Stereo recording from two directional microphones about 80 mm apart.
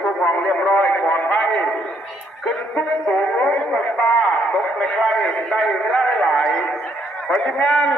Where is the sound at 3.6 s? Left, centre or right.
Centre.